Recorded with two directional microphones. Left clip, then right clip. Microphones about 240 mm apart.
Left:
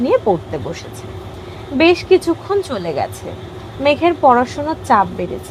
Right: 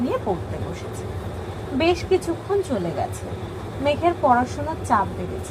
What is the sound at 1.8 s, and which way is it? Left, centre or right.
Speech, left.